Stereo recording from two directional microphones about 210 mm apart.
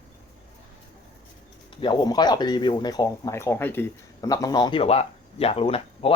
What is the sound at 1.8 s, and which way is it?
Speech, 20° left (ahead or behind).